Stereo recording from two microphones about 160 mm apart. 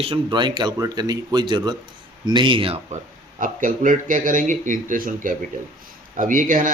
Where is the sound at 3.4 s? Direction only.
55° right (ahead or behind).